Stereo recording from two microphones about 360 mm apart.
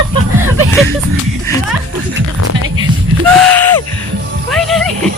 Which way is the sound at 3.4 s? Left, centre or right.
Centre.